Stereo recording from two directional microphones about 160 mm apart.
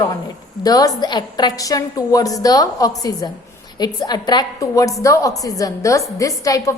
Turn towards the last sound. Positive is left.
turn(degrees=20)  # may be behind; listen again after turning